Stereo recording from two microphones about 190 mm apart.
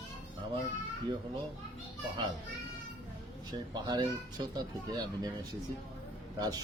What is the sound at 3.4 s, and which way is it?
A woman's voice, 20° right (ahead or behind).